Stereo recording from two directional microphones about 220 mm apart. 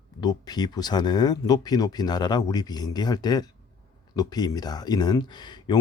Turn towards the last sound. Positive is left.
turn(degrees=20)  # may be behind; listen again after turning